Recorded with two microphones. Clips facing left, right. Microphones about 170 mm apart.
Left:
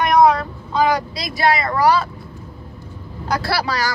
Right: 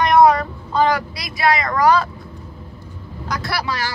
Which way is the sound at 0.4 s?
5° left (ahead or behind).